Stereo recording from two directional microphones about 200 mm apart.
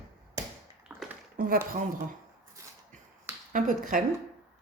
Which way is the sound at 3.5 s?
40° right (ahead or behind).